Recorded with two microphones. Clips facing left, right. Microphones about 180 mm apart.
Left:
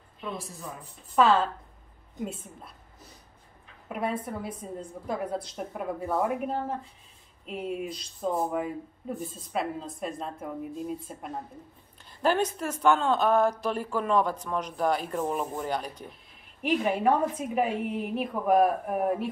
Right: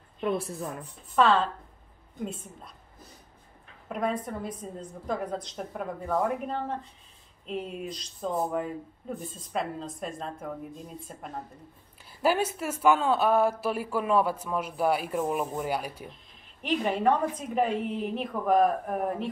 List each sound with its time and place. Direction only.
0.3 s speech: 65° right (ahead or behind)
1.1 s a woman's voice: 5° left (ahead or behind)
3.9 s a woman's voice: 5° left (ahead or behind)
12.1 s speech: 5° right (ahead or behind)
16.6 s a woman's voice: 10° left (ahead or behind)